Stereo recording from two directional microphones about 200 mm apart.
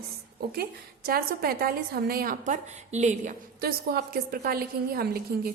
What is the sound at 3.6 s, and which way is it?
A woman's voice, 50° right (ahead or behind).